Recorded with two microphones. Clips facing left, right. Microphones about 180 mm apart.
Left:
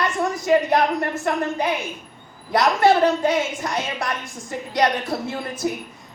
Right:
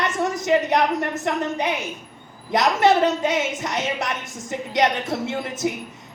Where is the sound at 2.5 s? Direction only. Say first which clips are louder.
Left 1 dB; 20° right (ahead or behind).